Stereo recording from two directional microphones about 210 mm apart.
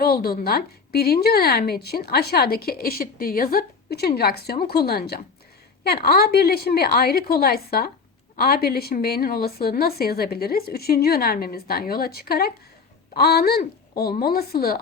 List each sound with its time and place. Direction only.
0.0 s a woman's voice: 45° left (ahead or behind)